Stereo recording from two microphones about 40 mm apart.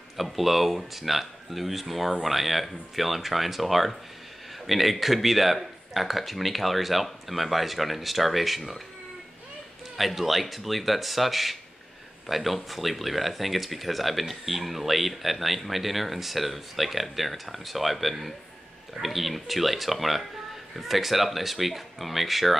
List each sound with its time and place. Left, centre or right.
0.2 s speech: centre
9.9 s speech: centre